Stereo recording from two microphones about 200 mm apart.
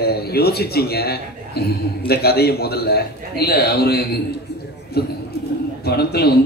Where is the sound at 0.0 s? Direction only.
50° left (ahead or behind).